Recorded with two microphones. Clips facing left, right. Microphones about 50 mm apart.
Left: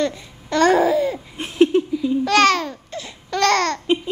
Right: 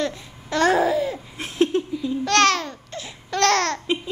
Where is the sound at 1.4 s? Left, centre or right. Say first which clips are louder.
Left 5 dB; left.